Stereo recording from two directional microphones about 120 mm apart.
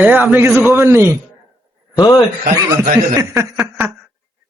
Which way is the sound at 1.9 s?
35° left (ahead or behind).